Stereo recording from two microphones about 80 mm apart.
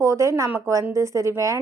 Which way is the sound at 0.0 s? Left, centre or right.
Right.